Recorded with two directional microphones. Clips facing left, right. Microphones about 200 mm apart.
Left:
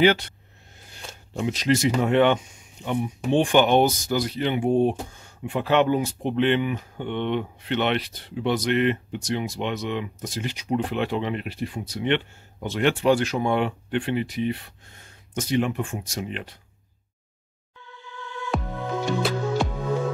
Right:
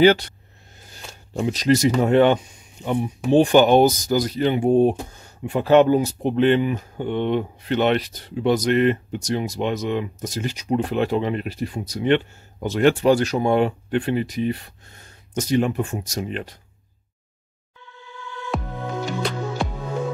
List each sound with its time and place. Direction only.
0.0 s speech: 35° right (ahead or behind)
18.5 s music: centre (ahead or behind)